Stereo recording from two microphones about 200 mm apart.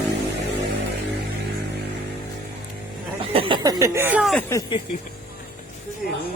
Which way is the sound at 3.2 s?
25° right (ahead or behind).